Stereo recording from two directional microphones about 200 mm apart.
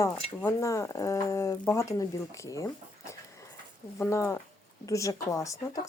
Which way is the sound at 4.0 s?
15° left (ahead or behind).